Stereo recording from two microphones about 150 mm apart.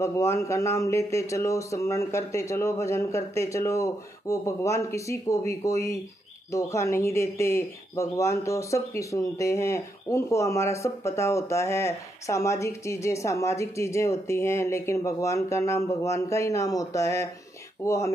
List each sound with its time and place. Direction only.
0.0 s speech: 20° left (ahead or behind)